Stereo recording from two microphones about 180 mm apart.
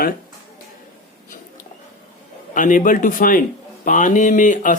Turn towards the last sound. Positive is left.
turn(degrees=45)  # may be behind; listen again after turning